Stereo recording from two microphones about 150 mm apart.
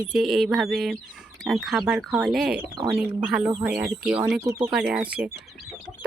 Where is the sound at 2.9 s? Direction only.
5° right (ahead or behind).